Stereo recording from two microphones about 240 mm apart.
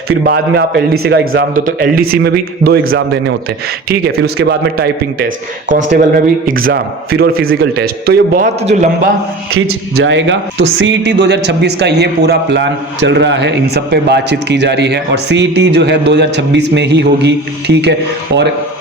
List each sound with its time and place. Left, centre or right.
0.3 s a man's voice: right
1.2 s a man's voice: right
1.5 s a man's voice: right
9.9 s a man's voice: right